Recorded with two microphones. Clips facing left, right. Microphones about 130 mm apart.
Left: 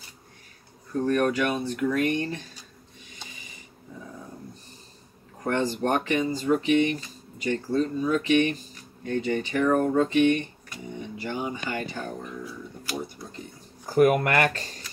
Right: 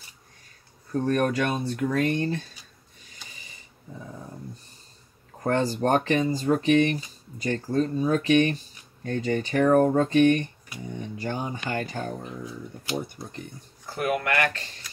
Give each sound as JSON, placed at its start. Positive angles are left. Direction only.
{"t": 1.0, "sound": "speech", "side_deg": -35}
{"t": 5.4, "sound": "speech", "side_deg": -40}
{"t": 13.8, "sound": "speech", "side_deg": 40}